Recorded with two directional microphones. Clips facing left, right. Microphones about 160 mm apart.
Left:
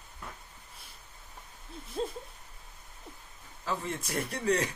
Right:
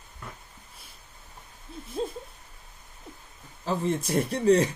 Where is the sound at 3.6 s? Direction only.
25° right (ahead or behind).